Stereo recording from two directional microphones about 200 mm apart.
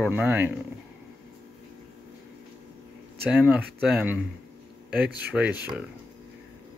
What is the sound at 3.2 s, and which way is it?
Speech, 10° right (ahead or behind).